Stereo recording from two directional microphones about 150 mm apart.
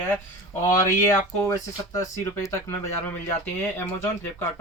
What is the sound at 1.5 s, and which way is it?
Speech, 20° left (ahead or behind).